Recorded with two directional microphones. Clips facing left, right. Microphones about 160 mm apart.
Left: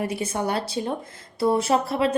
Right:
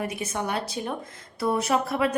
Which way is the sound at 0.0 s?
30° left (ahead or behind).